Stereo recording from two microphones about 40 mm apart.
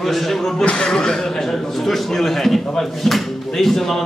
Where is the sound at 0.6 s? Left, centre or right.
Left.